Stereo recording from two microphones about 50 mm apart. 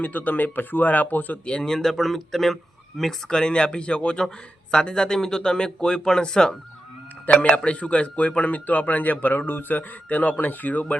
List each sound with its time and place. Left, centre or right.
0.0 s speech: left
1.5 s speech: centre
3.3 s speech: centre
7.5 s speech: left